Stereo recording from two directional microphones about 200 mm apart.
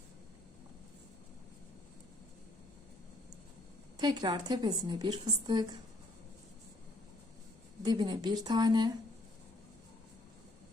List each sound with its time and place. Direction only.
3.9 s a woman's voice: 20° right (ahead or behind)
7.8 s a woman's voice: 20° right (ahead or behind)